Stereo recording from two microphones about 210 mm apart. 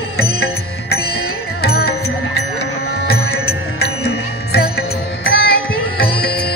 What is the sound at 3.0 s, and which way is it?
Music, 50° left (ahead or behind).